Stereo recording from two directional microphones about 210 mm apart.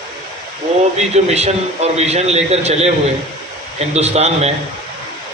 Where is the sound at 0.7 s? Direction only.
30° right (ahead or behind).